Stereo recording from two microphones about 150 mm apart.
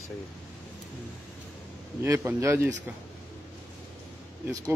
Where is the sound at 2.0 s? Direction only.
15° right (ahead or behind).